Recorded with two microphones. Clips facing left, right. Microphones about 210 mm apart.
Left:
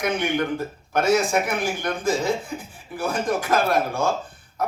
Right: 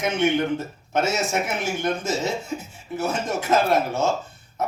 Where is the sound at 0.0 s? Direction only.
25° right (ahead or behind).